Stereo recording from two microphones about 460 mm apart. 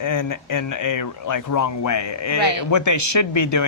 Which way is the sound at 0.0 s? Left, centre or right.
Left.